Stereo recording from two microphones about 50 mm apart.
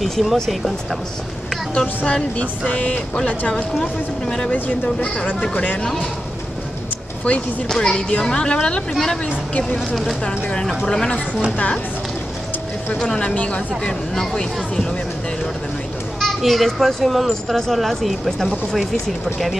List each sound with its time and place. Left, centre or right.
0.0 s speech: centre
2.0 s speech: centre
4.8 s speech: centre
7.2 s speech: centre
9.8 s speech: centre
10.2 s speech: centre
12.9 s speech: centre
13.2 s speech: left
14.1 s speech: centre
16.2 s speech: centre